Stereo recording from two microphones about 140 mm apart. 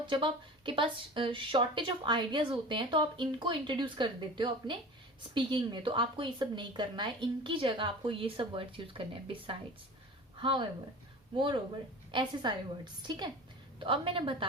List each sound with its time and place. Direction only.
0.0 s a woman's voice: 35° right (ahead or behind)
12.1 s a woman's voice: 35° right (ahead or behind)